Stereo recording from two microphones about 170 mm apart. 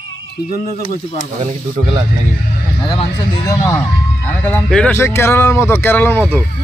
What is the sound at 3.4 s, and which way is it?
Speech, 20° left (ahead or behind).